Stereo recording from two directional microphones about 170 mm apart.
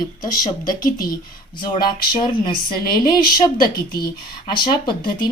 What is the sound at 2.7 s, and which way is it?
Speech, 60° left (ahead or behind).